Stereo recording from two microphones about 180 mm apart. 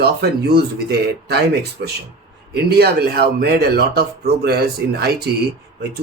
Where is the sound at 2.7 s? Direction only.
60° right (ahead or behind).